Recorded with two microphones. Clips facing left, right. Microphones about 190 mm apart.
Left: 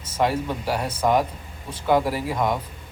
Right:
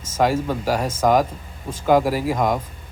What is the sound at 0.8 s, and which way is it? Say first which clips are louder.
Speech: right 3 dB; 40° right (ahead or behind).